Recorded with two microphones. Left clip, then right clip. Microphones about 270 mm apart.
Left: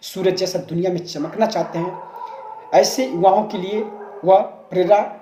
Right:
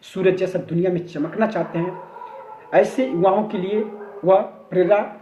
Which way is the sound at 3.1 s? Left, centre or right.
Left.